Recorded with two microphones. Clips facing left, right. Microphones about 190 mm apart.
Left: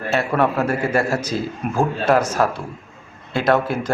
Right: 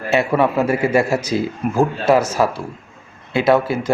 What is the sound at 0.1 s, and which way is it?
A man's voice, 10° right (ahead or behind).